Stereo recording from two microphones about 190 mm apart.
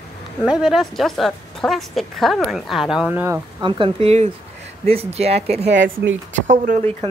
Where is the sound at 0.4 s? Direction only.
5° right (ahead or behind).